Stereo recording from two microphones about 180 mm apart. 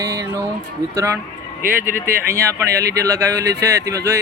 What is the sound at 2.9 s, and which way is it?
Speech, 15° right (ahead or behind).